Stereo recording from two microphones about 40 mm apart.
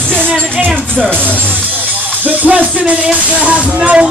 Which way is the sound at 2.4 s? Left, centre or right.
Centre.